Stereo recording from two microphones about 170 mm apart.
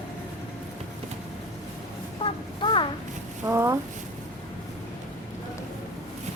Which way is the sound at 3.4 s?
15° right (ahead or behind).